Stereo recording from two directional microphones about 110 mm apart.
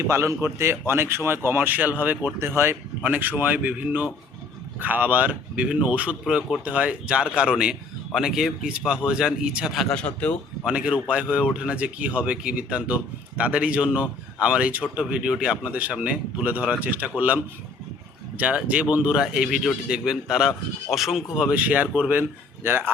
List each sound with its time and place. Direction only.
0.1 s speech: 25° right (ahead or behind); by 9.9 s 5° right (ahead or behind)
9.9 s a man's voice: 10° left (ahead or behind)
10.7 s speech: 10° right (ahead or behind)